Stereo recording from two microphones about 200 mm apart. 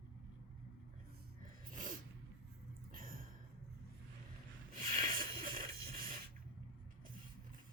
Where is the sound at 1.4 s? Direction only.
40° right (ahead or behind).